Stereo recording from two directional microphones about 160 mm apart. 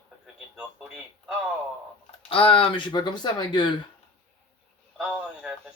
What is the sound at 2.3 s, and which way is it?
Speech, 35° left (ahead or behind).